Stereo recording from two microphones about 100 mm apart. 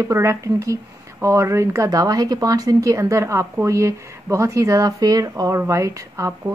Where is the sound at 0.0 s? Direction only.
30° right (ahead or behind).